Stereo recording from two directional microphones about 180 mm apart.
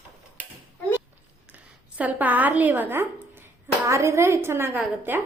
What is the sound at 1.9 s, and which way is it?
A woman's voice, 10° right (ahead or behind).